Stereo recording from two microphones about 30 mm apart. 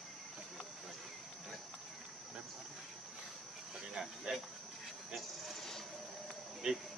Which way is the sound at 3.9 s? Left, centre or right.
Centre.